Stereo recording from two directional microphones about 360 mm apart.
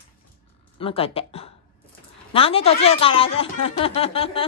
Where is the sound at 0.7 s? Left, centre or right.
Centre.